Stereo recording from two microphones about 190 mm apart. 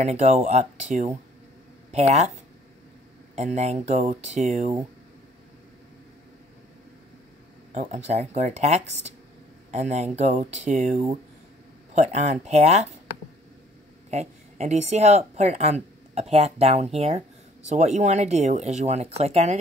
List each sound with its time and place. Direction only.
0.0 s speech: 35° right (ahead or behind)
3.3 s speech: 35° right (ahead or behind)
7.7 s speech: 35° right (ahead or behind)
14.1 s speech: 35° right (ahead or behind)